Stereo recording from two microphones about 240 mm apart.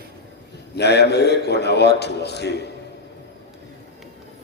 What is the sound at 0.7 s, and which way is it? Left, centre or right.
A man's voice, left.